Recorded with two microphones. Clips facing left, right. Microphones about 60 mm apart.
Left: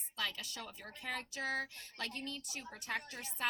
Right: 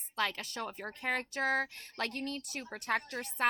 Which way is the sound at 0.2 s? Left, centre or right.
Right.